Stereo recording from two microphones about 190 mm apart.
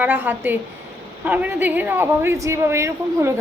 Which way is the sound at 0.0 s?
10° right (ahead or behind).